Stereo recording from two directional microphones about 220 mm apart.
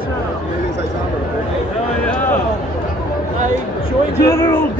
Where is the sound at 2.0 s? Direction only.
10° left (ahead or behind).